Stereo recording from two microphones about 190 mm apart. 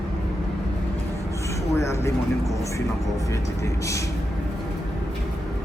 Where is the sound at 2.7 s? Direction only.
15° left (ahead or behind).